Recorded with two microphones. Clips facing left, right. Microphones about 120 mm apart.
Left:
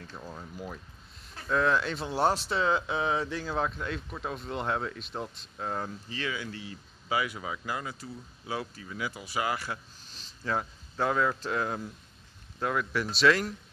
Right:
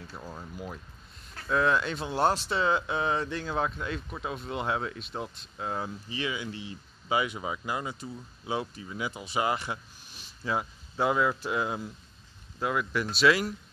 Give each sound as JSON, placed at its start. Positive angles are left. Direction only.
{"t": 0.0, "sound": "speech", "side_deg": -5}
{"t": 6.0, "sound": "speech", "side_deg": -15}